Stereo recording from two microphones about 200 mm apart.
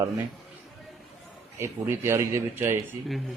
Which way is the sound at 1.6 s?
15° right (ahead or behind).